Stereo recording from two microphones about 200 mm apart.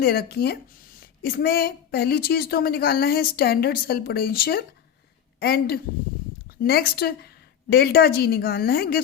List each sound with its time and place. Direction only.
0.0 s a woman's voice: 50° left (ahead or behind)